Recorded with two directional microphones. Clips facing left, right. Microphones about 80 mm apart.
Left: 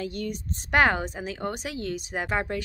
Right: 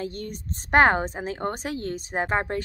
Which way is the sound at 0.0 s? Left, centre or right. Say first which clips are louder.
Left 1 dB; right.